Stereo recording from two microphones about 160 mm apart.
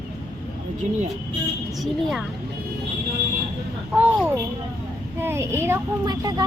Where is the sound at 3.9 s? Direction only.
10° right (ahead or behind).